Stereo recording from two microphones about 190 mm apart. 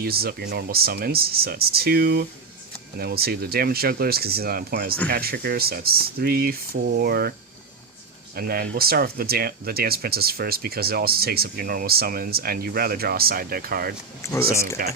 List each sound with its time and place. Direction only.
0.0 s speech: 55° right (ahead or behind)
8.4 s speech: 55° right (ahead or behind)
14.2 s speech: 15° left (ahead or behind)
14.8 s speech: 50° right (ahead or behind)